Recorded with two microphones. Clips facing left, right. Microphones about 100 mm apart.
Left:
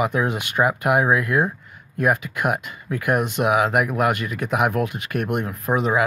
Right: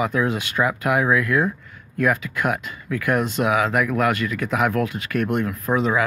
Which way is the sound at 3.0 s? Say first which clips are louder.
Even; 15° left (ahead or behind).